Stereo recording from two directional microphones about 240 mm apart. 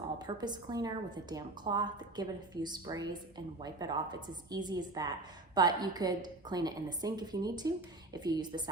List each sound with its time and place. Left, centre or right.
0.2 s a woman's voice: centre